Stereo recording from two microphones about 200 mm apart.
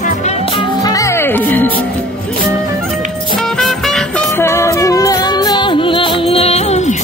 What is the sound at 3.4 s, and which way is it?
Music, centre (ahead or behind).